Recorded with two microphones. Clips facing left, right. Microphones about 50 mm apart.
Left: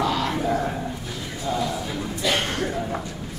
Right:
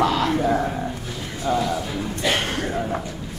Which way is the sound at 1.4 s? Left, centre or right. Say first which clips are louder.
Right 4 dB; right.